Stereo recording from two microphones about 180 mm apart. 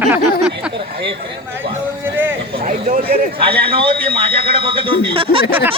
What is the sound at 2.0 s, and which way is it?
Speech, 10° right (ahead or behind).